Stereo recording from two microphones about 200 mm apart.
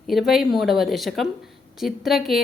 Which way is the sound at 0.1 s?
Centre (ahead or behind).